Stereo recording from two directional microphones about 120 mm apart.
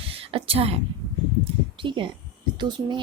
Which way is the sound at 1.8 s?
45° right (ahead or behind).